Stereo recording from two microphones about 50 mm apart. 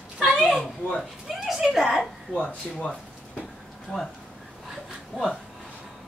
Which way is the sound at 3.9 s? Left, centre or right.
Left.